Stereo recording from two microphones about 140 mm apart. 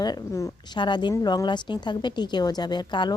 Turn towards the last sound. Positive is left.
turn(degrees=30)  # may be behind; listen again after turning